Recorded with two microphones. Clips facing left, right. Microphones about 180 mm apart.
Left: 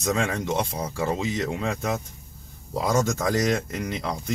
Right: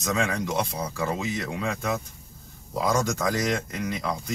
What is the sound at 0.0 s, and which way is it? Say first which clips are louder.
Speech: left 1 dB; 25° left (ahead or behind).